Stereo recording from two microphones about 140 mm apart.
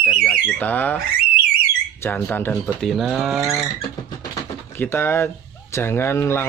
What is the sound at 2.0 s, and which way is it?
Speech, 15° left (ahead or behind).